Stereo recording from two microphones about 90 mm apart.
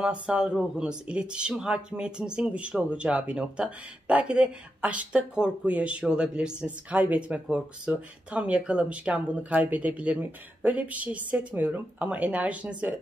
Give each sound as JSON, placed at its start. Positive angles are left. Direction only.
{"t": 0.0, "sound": "speech", "side_deg": -10}